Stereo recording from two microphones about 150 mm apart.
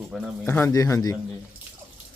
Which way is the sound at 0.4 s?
15° left (ahead or behind).